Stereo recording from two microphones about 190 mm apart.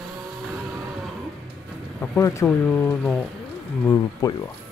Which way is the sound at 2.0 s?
15° left (ahead or behind).